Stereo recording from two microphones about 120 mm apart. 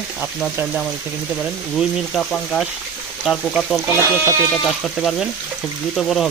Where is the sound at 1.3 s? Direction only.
Centre (ahead or behind).